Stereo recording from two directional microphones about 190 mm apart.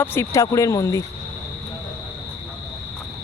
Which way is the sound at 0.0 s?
10° left (ahead or behind).